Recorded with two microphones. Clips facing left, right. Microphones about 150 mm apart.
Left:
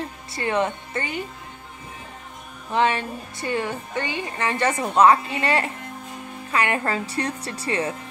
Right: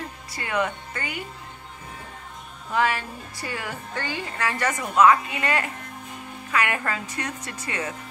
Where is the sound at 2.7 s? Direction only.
25° left (ahead or behind).